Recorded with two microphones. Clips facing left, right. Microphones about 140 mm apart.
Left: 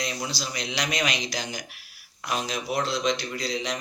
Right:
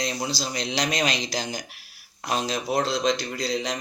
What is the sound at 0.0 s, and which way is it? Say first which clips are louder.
Speech: right 3 dB; 35° right (ahead or behind).